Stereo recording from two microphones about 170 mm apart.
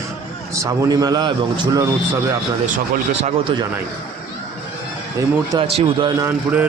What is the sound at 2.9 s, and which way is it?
Speech, 45° right (ahead or behind).